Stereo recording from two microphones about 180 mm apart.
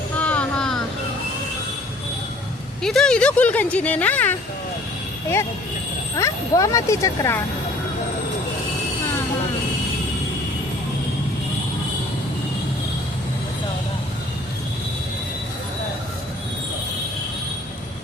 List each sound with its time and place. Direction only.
0.2 s vehicle: 5° left (ahead or behind)
2.8 s speech: 5° left (ahead or behind)
6.1 s speech: 15° left (ahead or behind)